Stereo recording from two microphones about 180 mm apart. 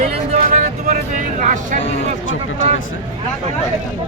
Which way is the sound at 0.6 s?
45° right (ahead or behind).